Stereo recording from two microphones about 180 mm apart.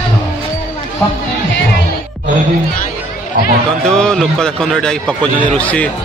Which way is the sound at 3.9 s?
5° left (ahead or behind).